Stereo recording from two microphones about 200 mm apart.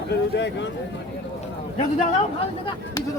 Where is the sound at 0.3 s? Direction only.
60° left (ahead or behind).